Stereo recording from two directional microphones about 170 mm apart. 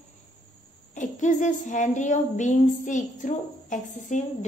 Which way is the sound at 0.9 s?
45° left (ahead or behind).